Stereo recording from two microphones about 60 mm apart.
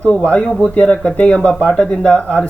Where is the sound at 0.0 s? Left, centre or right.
Left.